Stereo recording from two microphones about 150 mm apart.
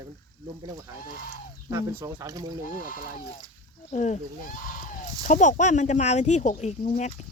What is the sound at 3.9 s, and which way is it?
Speech, 55° left (ahead or behind).